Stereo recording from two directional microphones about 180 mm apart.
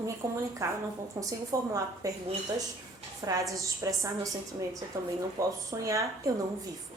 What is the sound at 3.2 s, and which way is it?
Speech, 15° right (ahead or behind).